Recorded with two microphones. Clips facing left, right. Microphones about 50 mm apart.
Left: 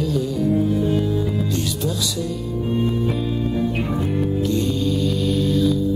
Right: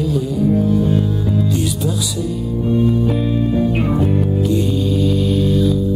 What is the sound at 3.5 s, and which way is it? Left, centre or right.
Music, centre.